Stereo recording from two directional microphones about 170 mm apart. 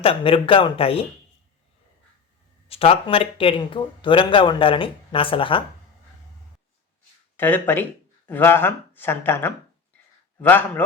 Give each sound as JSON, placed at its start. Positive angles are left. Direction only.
{"t": 0.0, "sound": "speech", "side_deg": 35}
{"t": 2.6, "sound": "speech", "side_deg": 35}
{"t": 7.3, "sound": "speech", "side_deg": 10}